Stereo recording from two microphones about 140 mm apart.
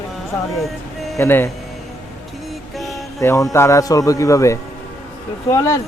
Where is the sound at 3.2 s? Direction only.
20° left (ahead or behind).